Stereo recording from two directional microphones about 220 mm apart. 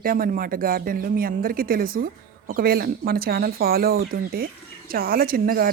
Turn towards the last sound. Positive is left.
turn(degrees=-40)  # may be behind; listen again after turning